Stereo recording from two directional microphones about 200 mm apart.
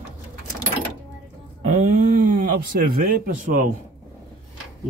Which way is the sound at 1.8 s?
40° right (ahead or behind).